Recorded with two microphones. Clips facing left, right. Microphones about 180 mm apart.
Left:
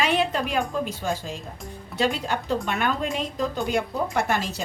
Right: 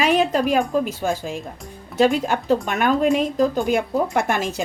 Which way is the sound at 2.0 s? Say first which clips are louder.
Right 7 dB; 45° right (ahead or behind).